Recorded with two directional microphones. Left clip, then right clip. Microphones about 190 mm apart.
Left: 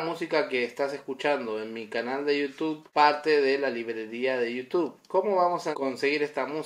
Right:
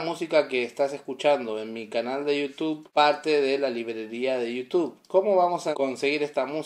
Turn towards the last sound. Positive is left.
turn(degrees=-35)  # may be behind; listen again after turning